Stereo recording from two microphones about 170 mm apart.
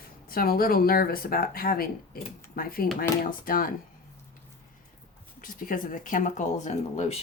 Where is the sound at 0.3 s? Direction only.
60° left (ahead or behind).